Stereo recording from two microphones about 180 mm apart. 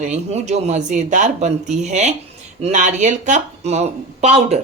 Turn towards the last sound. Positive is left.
turn(degrees=-35)  # may be behind; listen again after turning